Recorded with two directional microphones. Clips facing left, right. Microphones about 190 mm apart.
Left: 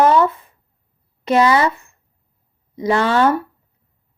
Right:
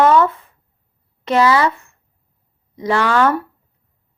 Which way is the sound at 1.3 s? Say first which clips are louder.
Even; 20° left (ahead or behind).